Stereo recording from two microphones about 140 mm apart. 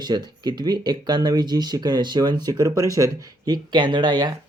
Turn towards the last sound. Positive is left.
turn(degrees=-35)  # may be behind; listen again after turning